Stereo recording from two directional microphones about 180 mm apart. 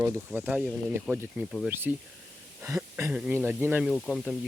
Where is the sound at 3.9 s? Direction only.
5° left (ahead or behind).